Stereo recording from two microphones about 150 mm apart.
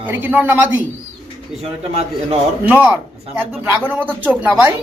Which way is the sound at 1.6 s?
45° right (ahead or behind).